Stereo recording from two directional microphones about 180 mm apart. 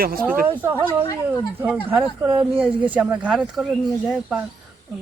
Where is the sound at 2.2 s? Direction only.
15° right (ahead or behind).